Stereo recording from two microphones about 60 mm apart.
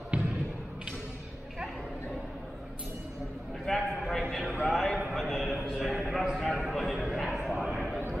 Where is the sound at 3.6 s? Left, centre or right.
Centre.